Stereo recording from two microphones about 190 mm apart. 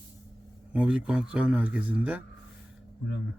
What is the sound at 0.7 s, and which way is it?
A man's voice, 5° right (ahead or behind).